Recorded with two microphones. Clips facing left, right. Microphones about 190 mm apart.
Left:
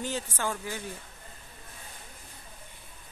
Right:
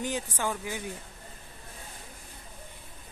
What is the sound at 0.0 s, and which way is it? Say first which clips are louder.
Speech: right 1 dB; 15° right (ahead or behind).